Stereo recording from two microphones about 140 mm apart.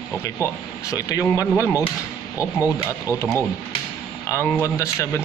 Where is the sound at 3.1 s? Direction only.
20° left (ahead or behind).